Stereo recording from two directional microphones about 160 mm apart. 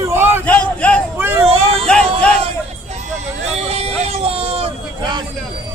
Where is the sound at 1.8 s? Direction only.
5° left (ahead or behind).